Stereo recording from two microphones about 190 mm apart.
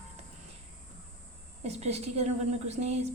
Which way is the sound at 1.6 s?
35° right (ahead or behind).